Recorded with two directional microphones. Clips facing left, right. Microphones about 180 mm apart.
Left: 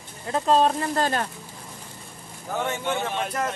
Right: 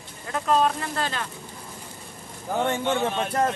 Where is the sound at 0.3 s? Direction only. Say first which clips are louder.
Left 2 dB; 30° left (ahead or behind).